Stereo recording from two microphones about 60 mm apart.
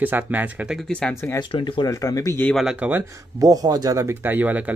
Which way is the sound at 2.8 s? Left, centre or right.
Right.